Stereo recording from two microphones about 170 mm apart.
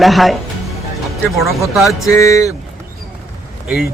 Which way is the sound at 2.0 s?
20° left (ahead or behind).